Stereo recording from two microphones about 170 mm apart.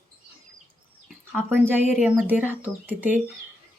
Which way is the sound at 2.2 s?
10° right (ahead or behind).